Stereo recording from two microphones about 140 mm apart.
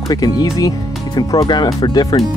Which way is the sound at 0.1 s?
30° left (ahead or behind).